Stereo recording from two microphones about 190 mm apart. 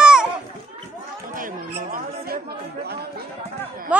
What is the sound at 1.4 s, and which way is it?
Chatter, 45° right (ahead or behind).